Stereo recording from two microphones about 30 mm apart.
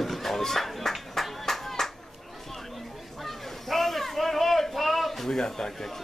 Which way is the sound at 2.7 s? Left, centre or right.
Centre.